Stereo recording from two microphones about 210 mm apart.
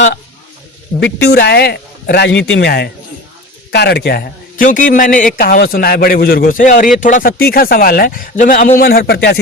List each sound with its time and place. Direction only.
0.9 s a man's voice: 50° left (ahead or behind)